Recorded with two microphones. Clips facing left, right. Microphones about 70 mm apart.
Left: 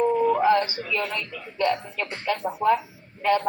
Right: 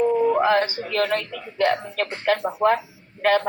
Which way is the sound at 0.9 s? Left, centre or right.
Right.